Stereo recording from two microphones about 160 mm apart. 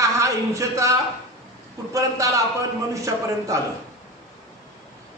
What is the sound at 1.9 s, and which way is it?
Speech, 20° right (ahead or behind).